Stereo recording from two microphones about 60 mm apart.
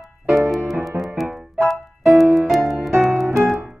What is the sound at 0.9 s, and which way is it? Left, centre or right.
Music, centre.